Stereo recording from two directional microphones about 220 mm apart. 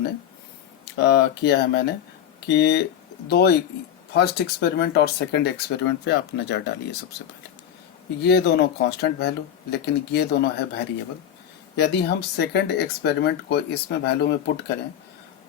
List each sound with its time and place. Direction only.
0.9 s speech: 50° left (ahead or behind)
8.2 s speech: 50° left (ahead or behind)